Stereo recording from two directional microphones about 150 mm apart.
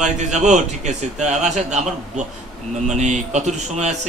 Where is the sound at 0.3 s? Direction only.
50° right (ahead or behind).